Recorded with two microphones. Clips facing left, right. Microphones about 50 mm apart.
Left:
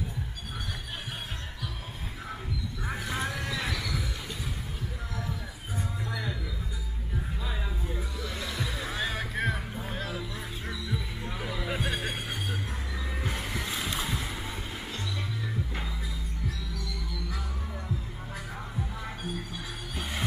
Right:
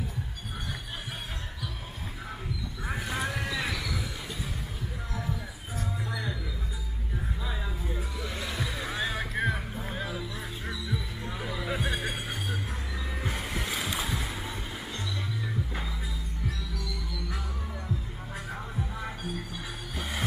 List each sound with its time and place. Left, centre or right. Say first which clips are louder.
2.9 s vehicle: right 1 dB; centre
6.0 s music: left 1 dB; centre
7.4 s music: even; centre
8.2 s music: right 1 dB; centre
8.6 s music: right 1 dB; centre
13.2 s music: even; centre
13.7 s boat: right 2 dB; centre
15.4 s music: right 1 dB; centre
19.2 s music: even; centre